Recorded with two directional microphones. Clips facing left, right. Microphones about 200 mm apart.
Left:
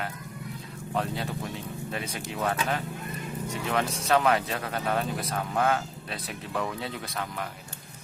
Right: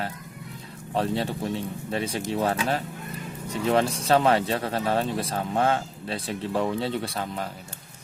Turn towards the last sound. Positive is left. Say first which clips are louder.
# right 4 dB
turn(degrees=-30)  # may be behind; listen again after turning